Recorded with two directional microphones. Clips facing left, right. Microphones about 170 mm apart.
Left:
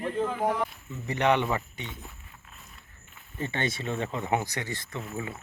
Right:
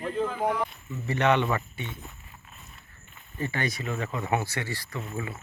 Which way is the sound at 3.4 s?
25° left (ahead or behind).